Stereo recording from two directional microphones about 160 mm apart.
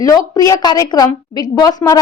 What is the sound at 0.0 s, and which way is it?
A woman's voice, 20° left (ahead or behind).